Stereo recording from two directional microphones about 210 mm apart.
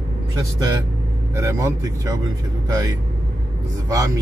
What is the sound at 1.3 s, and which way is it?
Speech, 15° right (ahead or behind).